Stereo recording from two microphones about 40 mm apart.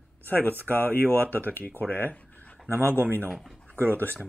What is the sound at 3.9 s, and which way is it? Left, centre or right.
Speech, left.